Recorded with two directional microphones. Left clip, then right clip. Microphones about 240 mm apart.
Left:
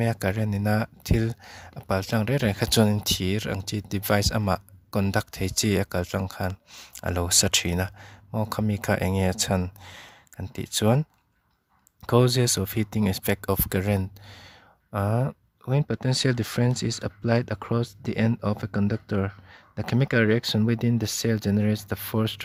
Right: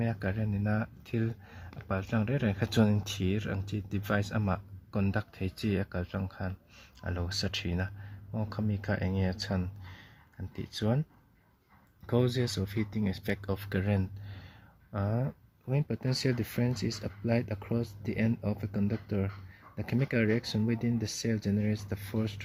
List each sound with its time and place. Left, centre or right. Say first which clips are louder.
0.0 s speech: left 8 dB; left
12.0 s speech: left 9 dB; left